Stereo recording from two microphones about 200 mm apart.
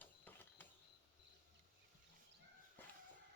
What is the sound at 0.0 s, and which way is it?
Printer, 10° left (ahead or behind).